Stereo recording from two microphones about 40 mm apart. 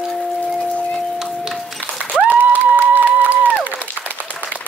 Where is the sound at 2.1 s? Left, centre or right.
Right.